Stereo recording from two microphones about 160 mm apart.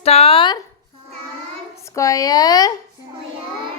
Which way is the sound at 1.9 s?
20° left (ahead or behind).